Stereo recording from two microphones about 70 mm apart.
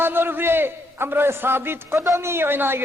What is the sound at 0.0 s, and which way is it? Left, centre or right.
A man's voice, right.